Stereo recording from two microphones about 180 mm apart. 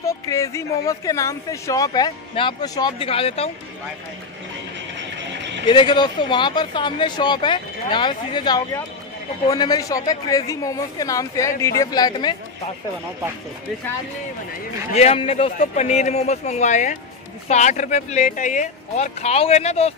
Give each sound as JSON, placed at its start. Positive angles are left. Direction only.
{"t": 0.0, "sound": "speech", "side_deg": 15}
{"t": 5.7, "sound": "speech", "side_deg": 25}
{"t": 15.0, "sound": "speech", "side_deg": 35}
{"t": 15.5, "sound": "speech", "side_deg": 45}